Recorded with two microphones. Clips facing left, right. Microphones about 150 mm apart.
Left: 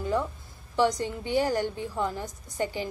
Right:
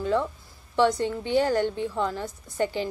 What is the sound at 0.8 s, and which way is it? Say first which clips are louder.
A woman's voice: right 3 dB; 15° left (ahead or behind).